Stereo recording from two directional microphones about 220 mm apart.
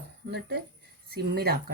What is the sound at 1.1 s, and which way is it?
Speech, 45° right (ahead or behind).